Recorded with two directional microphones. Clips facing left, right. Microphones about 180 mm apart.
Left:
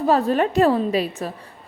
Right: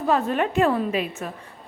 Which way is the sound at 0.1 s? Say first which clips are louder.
Left 3 dB; 35° left (ahead or behind).